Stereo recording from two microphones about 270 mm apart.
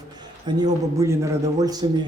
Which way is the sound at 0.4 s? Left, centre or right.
Centre.